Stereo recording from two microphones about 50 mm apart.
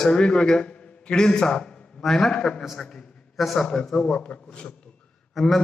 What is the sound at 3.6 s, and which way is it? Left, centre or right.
Speech, centre.